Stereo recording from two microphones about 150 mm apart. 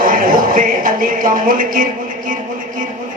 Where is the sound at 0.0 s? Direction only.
65° right (ahead or behind).